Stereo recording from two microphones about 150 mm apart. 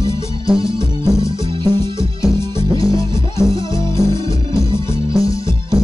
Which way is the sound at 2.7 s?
35° right (ahead or behind).